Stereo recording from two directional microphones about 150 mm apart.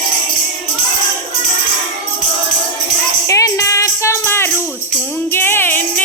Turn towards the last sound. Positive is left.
turn(degrees=15)  # may be behind; listen again after turning